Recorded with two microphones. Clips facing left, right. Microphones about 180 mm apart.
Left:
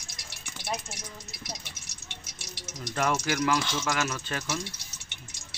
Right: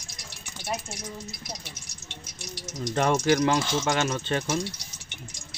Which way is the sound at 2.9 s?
30° right (ahead or behind).